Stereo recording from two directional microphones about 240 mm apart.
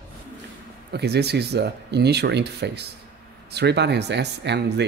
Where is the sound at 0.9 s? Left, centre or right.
Right.